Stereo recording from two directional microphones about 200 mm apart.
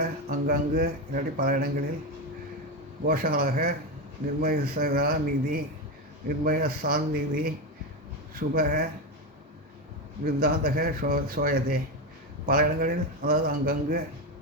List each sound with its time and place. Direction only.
0.0 s speech: 45° right (ahead or behind)
3.1 s speech: 45° right (ahead or behind)
10.2 s speech: 50° right (ahead or behind)